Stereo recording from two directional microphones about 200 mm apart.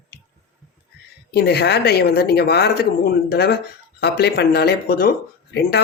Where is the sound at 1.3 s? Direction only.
55° left (ahead or behind).